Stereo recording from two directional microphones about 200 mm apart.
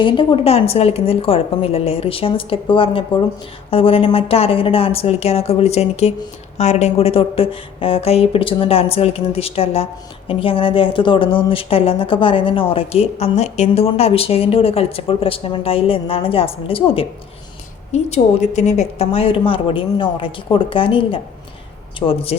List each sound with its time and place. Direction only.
0.0 s speech: 25° left (ahead or behind)